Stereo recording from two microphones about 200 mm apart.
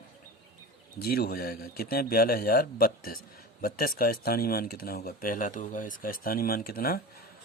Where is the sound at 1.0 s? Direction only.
50° left (ahead or behind).